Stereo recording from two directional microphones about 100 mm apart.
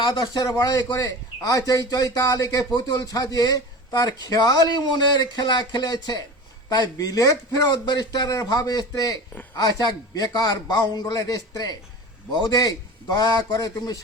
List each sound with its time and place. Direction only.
0.0 s a man's voice: 45° left (ahead or behind)